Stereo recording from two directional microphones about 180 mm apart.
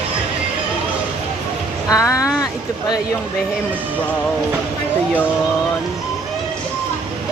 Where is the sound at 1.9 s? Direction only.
20° left (ahead or behind).